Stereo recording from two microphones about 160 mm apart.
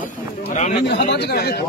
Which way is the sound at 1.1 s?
90° left.